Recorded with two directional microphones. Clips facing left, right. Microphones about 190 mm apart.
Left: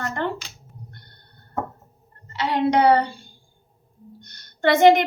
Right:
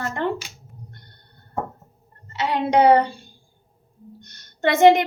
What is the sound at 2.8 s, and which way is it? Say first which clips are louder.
Speech: right 4 dB; 25° right (ahead or behind).